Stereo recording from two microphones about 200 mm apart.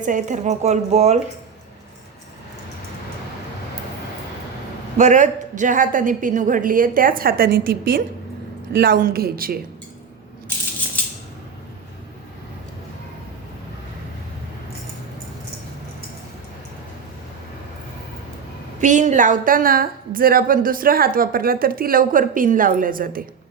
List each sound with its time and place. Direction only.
0.0 s a woman's voice: 40° right (ahead or behind)
4.9 s a woman's voice: 35° right (ahead or behind)
18.8 s a woman's voice: 40° right (ahead or behind)